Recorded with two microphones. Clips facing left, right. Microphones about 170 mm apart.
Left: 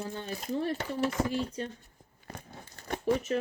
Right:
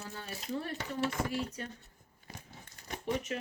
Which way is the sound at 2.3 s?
70° left (ahead or behind).